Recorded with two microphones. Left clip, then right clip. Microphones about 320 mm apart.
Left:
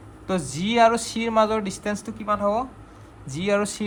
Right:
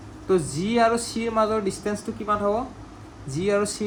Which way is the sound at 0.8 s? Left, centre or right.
Left.